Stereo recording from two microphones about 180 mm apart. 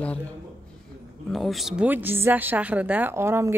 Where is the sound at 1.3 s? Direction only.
Centre (ahead or behind).